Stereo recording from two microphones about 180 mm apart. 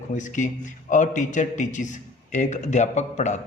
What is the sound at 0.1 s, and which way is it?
A man's voice, 45° left (ahead or behind).